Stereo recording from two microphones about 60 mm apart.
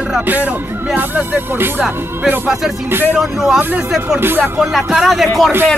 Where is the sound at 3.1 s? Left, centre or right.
Centre.